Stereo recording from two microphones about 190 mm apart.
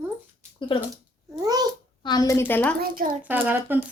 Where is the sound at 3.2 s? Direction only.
10° right (ahead or behind).